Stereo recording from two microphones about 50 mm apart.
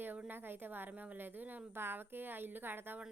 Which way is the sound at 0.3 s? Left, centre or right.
Right.